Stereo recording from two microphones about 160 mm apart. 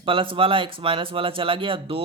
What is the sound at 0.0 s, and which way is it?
Speech, 35° right (ahead or behind).